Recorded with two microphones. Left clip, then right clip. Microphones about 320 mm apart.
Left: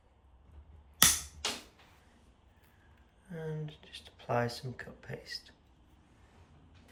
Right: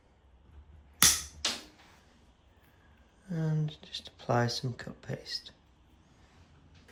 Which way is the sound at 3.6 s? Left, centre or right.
Centre.